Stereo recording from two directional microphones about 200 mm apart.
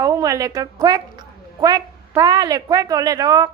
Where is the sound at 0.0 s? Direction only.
15° right (ahead or behind).